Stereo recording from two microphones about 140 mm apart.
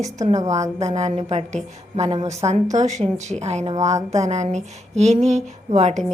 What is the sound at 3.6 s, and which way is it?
Speech, 25° right (ahead or behind).